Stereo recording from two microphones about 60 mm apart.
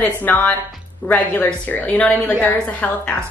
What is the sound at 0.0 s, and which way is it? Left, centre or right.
A woman's voice, left.